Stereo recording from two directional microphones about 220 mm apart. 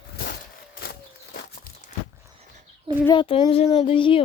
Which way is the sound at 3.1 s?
25° left (ahead or behind).